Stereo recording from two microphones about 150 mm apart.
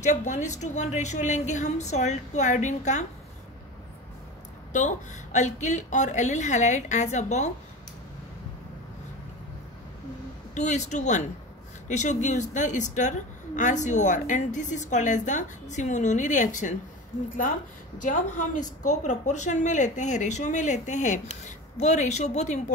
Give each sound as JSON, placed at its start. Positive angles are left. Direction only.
{"t": 0.0, "sound": "a woman's voice", "side_deg": 55}
{"t": 4.7, "sound": "a woman's voice", "side_deg": 55}
{"t": 10.5, "sound": "a woman's voice", "side_deg": 50}
{"t": 18.0, "sound": "a woman's voice", "side_deg": 60}